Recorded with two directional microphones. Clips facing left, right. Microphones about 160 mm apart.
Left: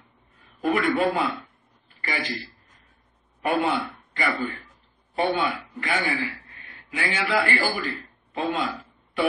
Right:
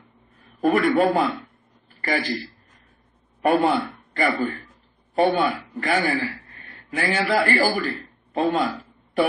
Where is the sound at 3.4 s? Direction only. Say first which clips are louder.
Right 5 dB; 45° right (ahead or behind).